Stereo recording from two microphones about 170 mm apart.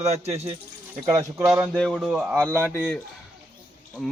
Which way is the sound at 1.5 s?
15° right (ahead or behind).